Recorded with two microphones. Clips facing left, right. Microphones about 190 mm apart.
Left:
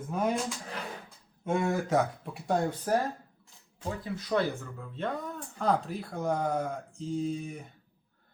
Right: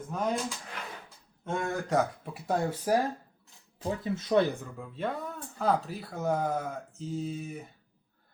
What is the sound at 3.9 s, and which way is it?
Speech, 20° right (ahead or behind).